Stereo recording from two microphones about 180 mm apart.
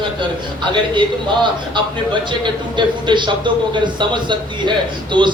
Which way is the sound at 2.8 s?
25° right (ahead or behind).